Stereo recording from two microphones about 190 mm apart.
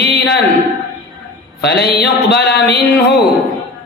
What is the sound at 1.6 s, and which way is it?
Speech, 60° left (ahead or behind).